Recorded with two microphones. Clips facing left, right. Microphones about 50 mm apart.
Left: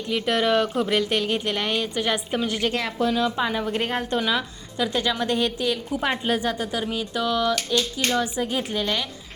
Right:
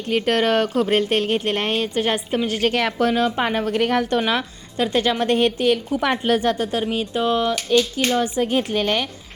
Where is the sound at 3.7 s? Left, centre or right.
Right.